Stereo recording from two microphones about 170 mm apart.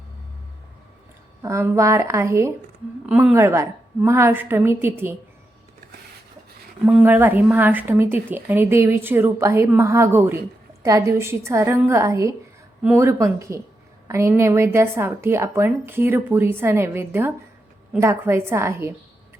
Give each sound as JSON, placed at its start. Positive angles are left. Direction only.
{"t": 1.4, "sound": "speech", "side_deg": -15}
{"t": 6.8, "sound": "speech", "side_deg": -10}